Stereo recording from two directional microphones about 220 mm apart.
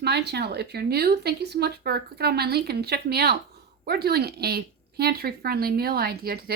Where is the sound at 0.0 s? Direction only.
50° right (ahead or behind).